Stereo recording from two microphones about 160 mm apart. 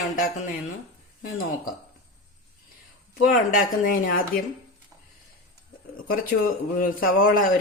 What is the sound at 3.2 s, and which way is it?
A man's voice, 60° left (ahead or behind).